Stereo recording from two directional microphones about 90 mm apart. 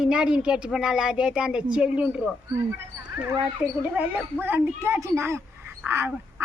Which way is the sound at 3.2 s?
25° right (ahead or behind).